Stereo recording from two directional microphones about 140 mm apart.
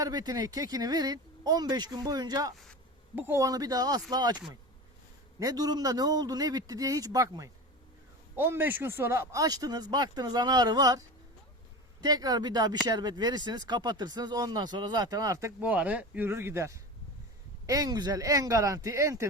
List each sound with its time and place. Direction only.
0.0 s speech: 25° right (ahead or behind)
3.2 s speech: 20° right (ahead or behind)
5.4 s speech: 25° right (ahead or behind)